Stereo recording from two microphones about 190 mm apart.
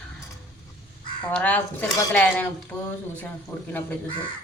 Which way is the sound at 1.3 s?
5° left (ahead or behind).